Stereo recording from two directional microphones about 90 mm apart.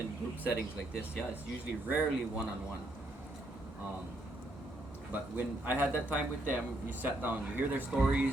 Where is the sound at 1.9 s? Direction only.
20° right (ahead or behind).